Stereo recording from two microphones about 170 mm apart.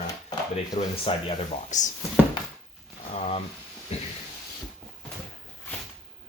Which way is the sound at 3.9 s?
40° left (ahead or behind).